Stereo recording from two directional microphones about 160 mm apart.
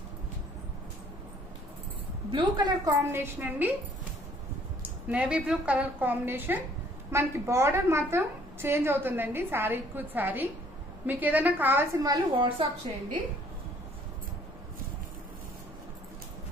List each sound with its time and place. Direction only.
2.3 s a woman's voice: 25° right (ahead or behind); by 3.7 s 10° right (ahead or behind)
5.1 s a woman's voice: 5° right (ahead or behind); by 12.6 s 25° right (ahead or behind)